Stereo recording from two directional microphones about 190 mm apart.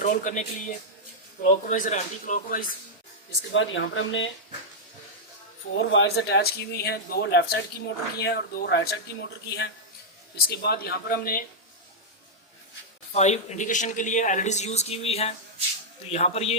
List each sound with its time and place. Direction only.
0.0 s speech: 45° left (ahead or behind)
3.5 s speech: 80° left
5.7 s speech: 85° left; by 11.4 s 50° left (ahead or behind)
13.1 s speech: 35° left (ahead or behind)